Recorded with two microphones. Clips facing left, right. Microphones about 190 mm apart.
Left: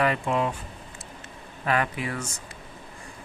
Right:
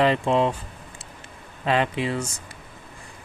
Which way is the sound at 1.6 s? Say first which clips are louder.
Right 4 dB; 25° right (ahead or behind).